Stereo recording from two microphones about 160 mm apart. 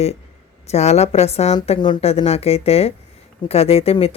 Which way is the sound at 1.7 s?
30° left (ahead or behind).